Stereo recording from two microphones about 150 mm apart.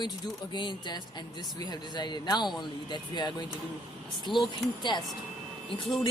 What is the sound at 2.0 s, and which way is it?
Speech, 30° left (ahead or behind).